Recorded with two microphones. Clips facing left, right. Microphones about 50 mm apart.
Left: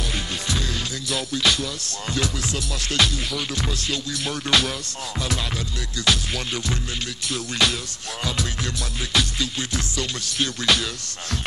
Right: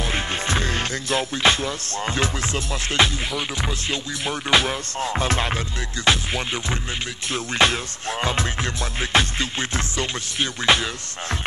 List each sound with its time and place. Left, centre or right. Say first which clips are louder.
0.1 s music: right 4 dB; right
6.0 s music: right 3 dB; right